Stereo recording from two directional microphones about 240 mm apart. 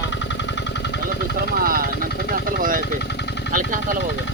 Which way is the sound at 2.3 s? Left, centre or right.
Right.